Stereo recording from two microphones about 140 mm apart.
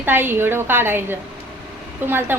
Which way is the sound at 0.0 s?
15° right (ahead or behind).